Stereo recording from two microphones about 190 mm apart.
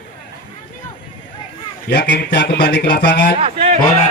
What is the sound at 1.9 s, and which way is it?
Speech, 60° left (ahead or behind).